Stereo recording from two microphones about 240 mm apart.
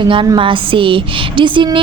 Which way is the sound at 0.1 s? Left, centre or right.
Right.